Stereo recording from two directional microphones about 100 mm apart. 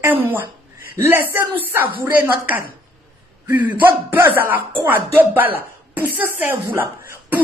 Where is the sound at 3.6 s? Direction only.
55° right (ahead or behind).